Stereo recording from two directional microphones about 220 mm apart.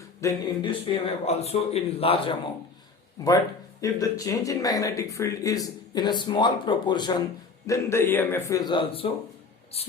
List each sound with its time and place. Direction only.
0.2 s a man's voice: 20° left (ahead or behind)
3.2 s speech: 15° left (ahead or behind)